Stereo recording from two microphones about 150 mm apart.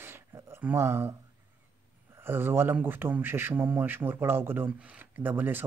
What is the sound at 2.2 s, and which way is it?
Speech, 15° right (ahead or behind).